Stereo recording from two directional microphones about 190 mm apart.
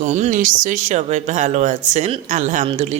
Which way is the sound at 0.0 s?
40° right (ahead or behind).